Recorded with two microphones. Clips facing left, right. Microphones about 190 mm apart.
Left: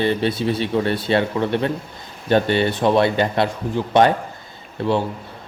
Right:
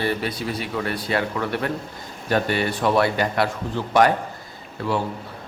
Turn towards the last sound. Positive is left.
turn(degrees=25)  # may be behind; listen again after turning